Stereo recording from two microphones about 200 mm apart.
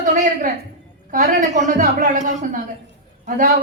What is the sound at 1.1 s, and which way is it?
Speech, 40° right (ahead or behind).